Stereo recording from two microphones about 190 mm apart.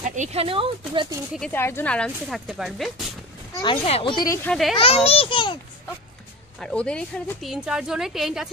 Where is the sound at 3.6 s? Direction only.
30° left (ahead or behind).